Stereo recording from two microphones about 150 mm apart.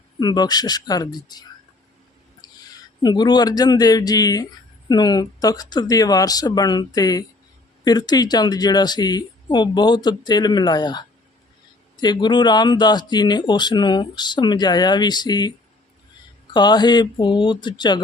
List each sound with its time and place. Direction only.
0.2 s speech: 25° left (ahead or behind)
2.4 s a sound: 25° left (ahead or behind)
3.0 s speech: 30° left (ahead or behind)